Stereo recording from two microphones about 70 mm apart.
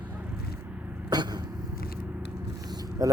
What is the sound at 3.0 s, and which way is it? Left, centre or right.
Speech, right.